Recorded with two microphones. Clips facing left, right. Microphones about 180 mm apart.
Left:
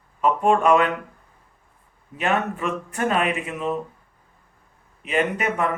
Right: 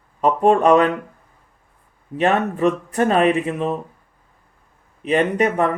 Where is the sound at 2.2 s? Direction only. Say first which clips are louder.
Right 6 dB; 35° right (ahead or behind).